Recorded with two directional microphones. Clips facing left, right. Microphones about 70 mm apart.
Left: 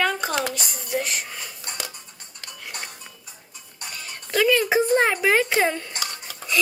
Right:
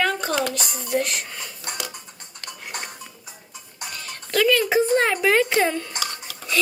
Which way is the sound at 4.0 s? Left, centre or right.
Centre.